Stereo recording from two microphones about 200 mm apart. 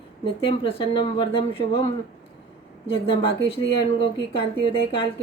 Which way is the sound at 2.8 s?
25° left (ahead or behind).